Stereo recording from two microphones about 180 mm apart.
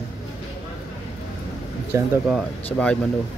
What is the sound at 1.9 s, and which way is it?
Speech, 15° right (ahead or behind).